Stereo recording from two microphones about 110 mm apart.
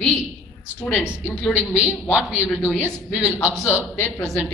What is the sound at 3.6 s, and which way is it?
Speech, 25° left (ahead or behind).